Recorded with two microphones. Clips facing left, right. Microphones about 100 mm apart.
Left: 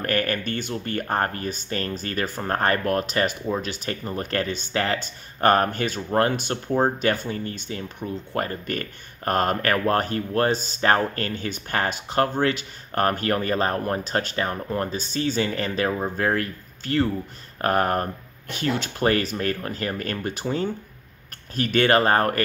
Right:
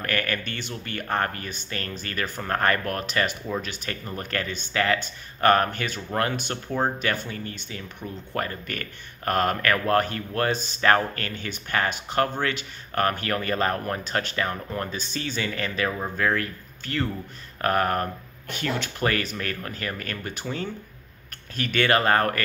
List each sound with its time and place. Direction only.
0.0 s speech: 35° left (ahead or behind)